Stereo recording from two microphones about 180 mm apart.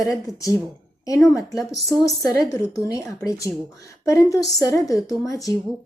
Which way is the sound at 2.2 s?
20° left (ahead or behind).